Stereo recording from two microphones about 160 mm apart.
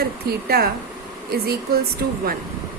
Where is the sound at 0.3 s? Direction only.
75° right (ahead or behind).